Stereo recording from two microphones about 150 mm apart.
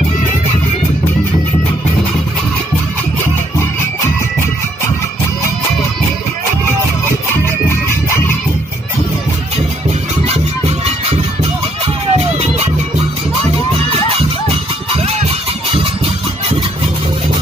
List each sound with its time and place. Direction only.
11.8 s music: 45° right (ahead or behind)